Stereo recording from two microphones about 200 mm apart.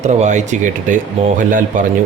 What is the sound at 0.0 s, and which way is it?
Speech, 35° right (ahead or behind).